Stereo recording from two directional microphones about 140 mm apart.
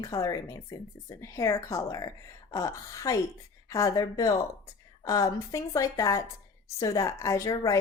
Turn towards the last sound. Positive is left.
turn(degrees=25)  # may be behind; listen again after turning